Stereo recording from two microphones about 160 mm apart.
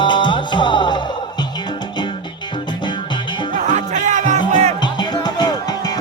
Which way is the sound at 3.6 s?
50° right (ahead or behind).